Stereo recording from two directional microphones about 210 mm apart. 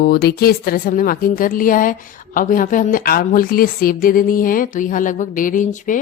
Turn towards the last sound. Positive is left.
turn(degrees=35)  # may be behind; listen again after turning